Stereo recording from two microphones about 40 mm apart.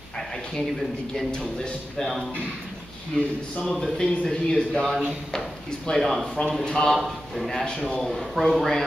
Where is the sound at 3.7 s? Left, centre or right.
Centre.